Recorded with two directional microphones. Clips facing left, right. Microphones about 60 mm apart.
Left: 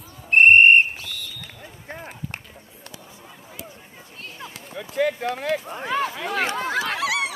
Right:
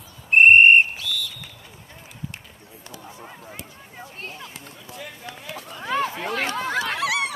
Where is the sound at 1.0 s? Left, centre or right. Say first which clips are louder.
Right 6 dB; left.